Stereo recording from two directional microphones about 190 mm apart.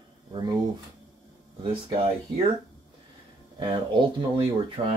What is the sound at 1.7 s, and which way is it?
Speech, 30° right (ahead or behind).